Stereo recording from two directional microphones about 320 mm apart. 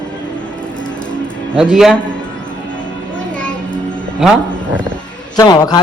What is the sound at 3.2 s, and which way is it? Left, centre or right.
Music, centre.